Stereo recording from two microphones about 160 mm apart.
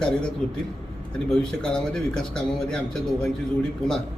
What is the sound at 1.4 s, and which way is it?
A man's voice, 5° left (ahead or behind).